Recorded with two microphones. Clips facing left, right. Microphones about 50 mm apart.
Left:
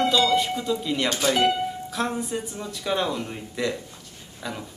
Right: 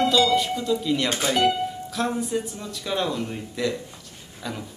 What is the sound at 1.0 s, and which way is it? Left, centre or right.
Speech, right.